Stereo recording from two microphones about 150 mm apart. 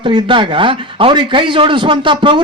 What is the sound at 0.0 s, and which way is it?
A man's voice, 30° right (ahead or behind).